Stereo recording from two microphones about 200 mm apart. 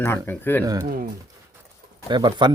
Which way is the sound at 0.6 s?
15° right (ahead or behind).